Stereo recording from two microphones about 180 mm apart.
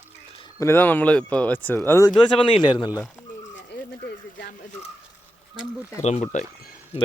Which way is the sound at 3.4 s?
90° left.